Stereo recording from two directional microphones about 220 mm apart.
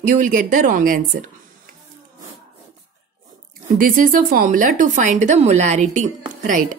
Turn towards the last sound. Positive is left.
turn(degrees=-35)  # may be behind; listen again after turning